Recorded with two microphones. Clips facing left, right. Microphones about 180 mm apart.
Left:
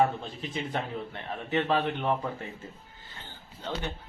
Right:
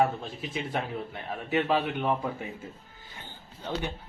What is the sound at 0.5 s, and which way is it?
A man's voice, 5° right (ahead or behind).